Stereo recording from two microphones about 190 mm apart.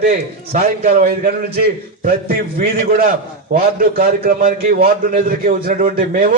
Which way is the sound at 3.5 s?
50° right (ahead or behind).